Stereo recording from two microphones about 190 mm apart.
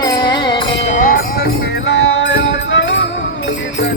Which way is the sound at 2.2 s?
75° left (ahead or behind).